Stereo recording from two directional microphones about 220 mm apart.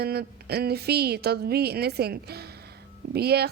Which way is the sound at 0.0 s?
45° right (ahead or behind).